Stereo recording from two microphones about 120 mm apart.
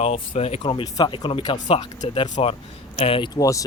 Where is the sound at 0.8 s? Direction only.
40° left (ahead or behind).